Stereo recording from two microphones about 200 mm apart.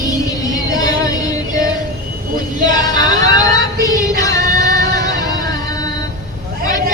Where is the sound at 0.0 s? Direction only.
20° left (ahead or behind).